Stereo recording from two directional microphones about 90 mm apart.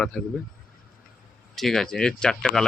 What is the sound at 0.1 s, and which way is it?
Speech, 10° left (ahead or behind).